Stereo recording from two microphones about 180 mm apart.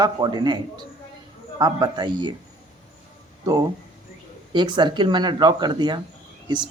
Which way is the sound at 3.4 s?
20° right (ahead or behind).